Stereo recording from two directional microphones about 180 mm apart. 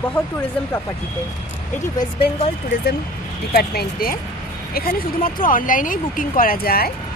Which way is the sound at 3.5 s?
55° left (ahead or behind).